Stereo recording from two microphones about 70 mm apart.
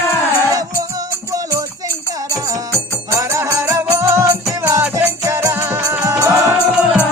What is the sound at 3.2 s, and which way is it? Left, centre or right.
Music, right.